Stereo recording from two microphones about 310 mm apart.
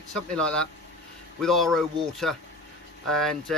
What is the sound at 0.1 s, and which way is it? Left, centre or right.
Speech, centre.